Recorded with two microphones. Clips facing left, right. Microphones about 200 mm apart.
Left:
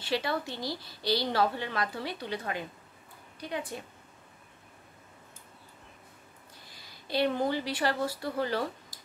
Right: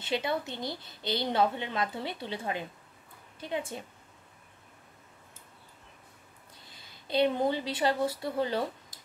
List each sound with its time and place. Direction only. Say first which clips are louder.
0.0 s a woman's voice: even; 20° right (ahead or behind)
6.7 s speech: right 2 dB; 20° right (ahead or behind)